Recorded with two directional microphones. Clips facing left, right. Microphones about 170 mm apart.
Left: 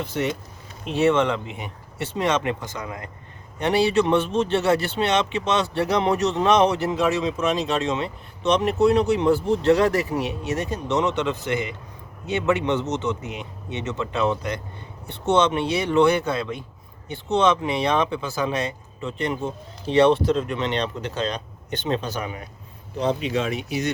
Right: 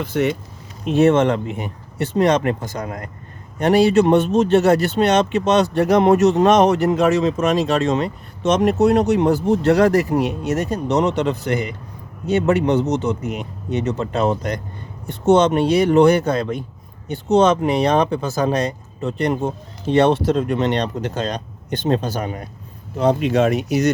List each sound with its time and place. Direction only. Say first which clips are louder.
0.0 s speech: right 6 dB; 60° right (ahead or behind)
0.9 s speech: right 5 dB; 45° right (ahead or behind)